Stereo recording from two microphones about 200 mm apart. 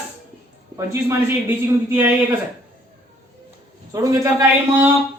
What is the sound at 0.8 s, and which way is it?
A man's voice, 10° right (ahead or behind).